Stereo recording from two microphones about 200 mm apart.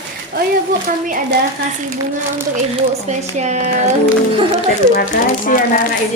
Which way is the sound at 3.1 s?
35° right (ahead or behind).